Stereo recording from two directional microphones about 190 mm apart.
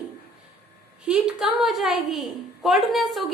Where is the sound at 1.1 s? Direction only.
5° right (ahead or behind).